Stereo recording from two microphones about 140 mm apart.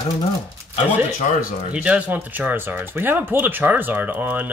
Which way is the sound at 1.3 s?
60° left (ahead or behind).